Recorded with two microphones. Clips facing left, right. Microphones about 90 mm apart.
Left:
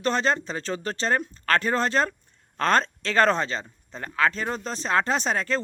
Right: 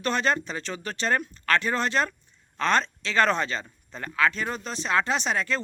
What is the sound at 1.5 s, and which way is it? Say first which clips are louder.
Speech: left 2 dB; 40° left (ahead or behind).